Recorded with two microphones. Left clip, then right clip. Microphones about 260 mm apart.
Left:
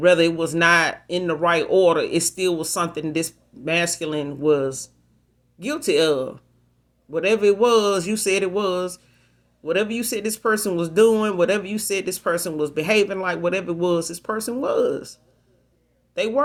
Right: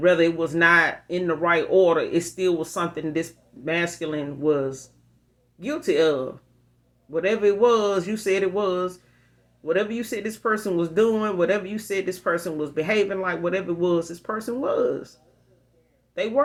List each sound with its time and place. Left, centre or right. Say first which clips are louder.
0.0 s speech: left 2 dB; left
16.1 s speech: left 3 dB; left